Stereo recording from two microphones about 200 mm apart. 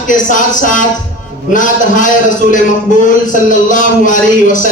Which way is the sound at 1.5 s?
40° left (ahead or behind).